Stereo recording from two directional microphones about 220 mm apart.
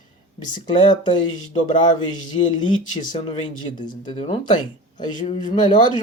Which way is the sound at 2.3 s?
30° left (ahead or behind).